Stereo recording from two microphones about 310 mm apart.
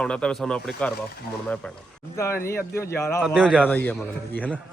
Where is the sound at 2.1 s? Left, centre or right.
Centre.